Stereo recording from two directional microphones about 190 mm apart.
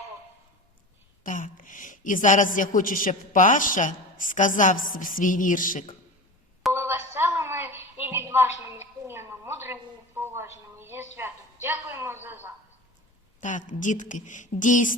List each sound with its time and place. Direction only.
1.2 s a woman's voice: 45° left (ahead or behind)
6.7 s a sound: 15° right (ahead or behind)
10.2 s a woman's voice: 15° right (ahead or behind)
13.4 s a woman's voice: 40° left (ahead or behind)